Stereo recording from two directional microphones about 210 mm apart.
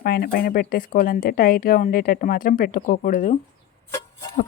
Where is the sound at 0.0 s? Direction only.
45° left (ahead or behind).